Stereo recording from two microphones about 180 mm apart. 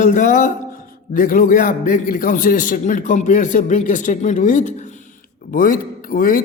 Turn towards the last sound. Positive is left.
turn(degrees=50)  # may be behind; listen again after turning